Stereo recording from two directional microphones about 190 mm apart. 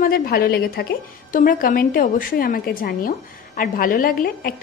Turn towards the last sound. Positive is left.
turn(degrees=50)  # may be behind; listen again after turning